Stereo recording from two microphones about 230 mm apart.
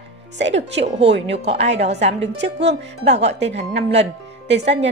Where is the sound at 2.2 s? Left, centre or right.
Right.